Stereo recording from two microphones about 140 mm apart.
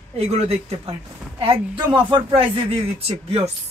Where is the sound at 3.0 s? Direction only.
45° right (ahead or behind).